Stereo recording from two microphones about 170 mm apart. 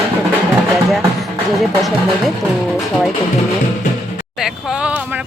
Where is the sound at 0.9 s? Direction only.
Centre (ahead or behind).